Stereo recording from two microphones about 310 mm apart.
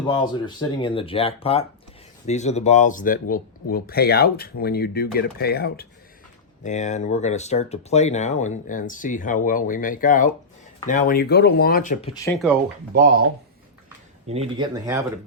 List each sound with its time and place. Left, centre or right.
0.0 s speech: centre
12.1 s speech: centre
12.9 s speech: right
14.3 s speech: centre